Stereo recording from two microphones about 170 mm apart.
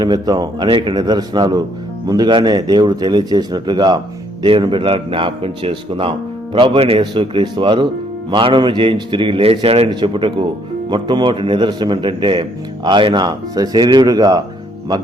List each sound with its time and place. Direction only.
0.0 s a man's voice: 25° right (ahead or behind)